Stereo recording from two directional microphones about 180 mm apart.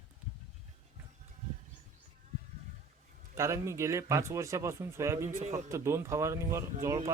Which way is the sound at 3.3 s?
15° right (ahead or behind).